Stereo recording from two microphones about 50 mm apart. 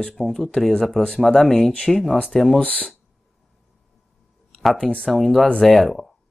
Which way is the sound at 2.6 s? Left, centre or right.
Left.